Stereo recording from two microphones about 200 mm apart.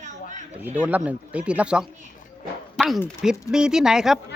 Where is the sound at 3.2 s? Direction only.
5° right (ahead or behind).